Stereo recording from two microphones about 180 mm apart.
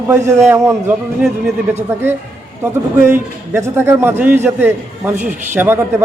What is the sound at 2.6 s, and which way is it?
A man's voice, 15° right (ahead or behind).